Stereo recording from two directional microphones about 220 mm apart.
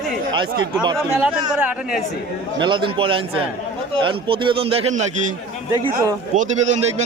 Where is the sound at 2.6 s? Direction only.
20° right (ahead or behind).